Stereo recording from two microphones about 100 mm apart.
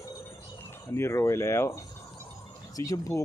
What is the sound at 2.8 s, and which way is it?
Speech, 35° left (ahead or behind).